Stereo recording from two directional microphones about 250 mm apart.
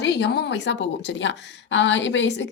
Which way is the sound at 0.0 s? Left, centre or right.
Left.